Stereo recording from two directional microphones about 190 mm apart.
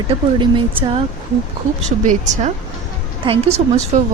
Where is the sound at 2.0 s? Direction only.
40° right (ahead or behind).